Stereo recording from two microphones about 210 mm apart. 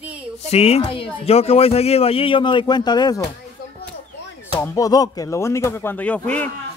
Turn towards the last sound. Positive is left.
turn(degrees=5)  # may be behind; listen again after turning